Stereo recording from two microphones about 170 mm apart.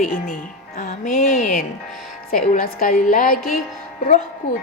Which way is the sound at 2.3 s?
60° left (ahead or behind).